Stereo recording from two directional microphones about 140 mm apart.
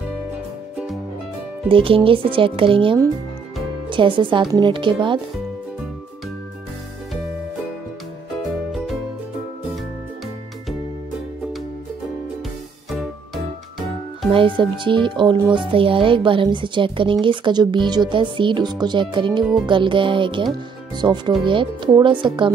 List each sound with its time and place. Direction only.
1.7 s speech: 40° right (ahead or behind)
12.9 s music: centre (ahead or behind)
14.3 s speech: 35° right (ahead or behind)